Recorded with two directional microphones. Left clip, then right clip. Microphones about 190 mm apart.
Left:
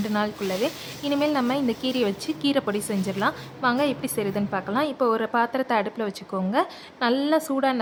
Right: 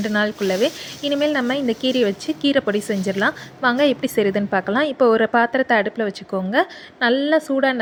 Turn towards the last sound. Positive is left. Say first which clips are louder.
# right 5 dB
turn(degrees=-15)  # may be behind; listen again after turning